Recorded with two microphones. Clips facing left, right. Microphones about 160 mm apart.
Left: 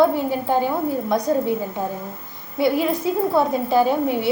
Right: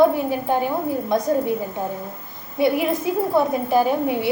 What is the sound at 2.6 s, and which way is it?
A woman's voice, 20° right (ahead or behind).